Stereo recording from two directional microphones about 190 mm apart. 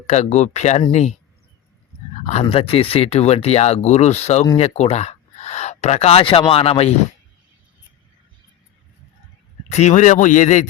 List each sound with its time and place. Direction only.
0.1 s speech: 40° left (ahead or behind)
2.2 s speech: 35° left (ahead or behind)
9.6 s speech: 35° left (ahead or behind)